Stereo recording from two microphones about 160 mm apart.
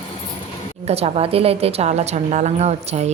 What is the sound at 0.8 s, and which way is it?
A woman's voice, 40° right (ahead or behind).